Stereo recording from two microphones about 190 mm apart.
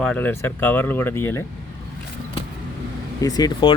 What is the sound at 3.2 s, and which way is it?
Speech, 20° left (ahead or behind).